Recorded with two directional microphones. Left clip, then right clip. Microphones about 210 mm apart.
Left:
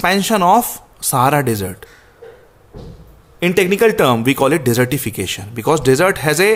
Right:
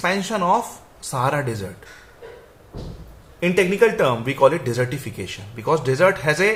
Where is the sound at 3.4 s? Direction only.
50° left (ahead or behind).